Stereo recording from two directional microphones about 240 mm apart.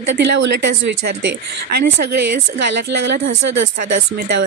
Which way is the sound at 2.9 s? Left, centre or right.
Right.